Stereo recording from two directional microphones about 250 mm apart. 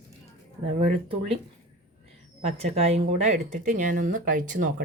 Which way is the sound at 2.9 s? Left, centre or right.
Right.